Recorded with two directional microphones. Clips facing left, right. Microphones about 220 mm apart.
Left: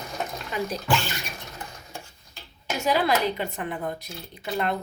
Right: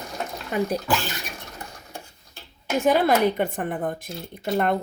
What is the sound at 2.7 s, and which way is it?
A woman's voice, 50° right (ahead or behind).